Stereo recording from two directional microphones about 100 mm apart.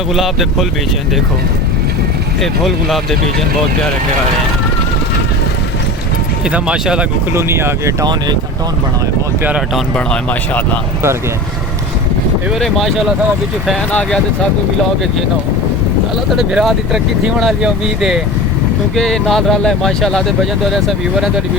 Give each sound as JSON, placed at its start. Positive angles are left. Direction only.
{"t": 2.4, "sound": "speech", "side_deg": 0}
{"t": 6.5, "sound": "speech", "side_deg": -10}
{"t": 7.3, "sound": "speech", "side_deg": -25}
{"t": 12.5, "sound": "speech", "side_deg": 0}
{"t": 16.3, "sound": "speech", "side_deg": -5}
{"t": 18.9, "sound": "speech", "side_deg": 5}